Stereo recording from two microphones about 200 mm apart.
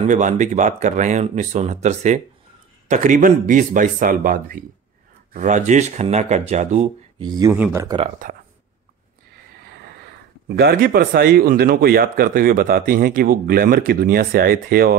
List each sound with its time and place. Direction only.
0.0 s speech: 35° right (ahead or behind)
7.2 s speech: 20° right (ahead or behind)
8.2 s speech: 40° right (ahead or behind)
10.5 s speech: 50° right (ahead or behind)